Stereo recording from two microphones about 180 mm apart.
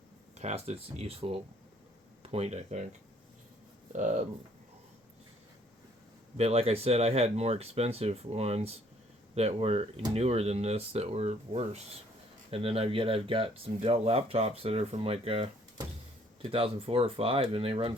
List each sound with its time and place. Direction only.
0.3 s speech: 35° right (ahead or behind)
3.9 s speech: 45° right (ahead or behind)
6.3 s speech: 35° right (ahead or behind)